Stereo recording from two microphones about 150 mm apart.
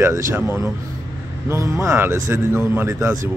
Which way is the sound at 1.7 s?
15° right (ahead or behind).